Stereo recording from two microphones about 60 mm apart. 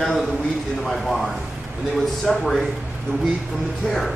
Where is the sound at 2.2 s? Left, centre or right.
Centre.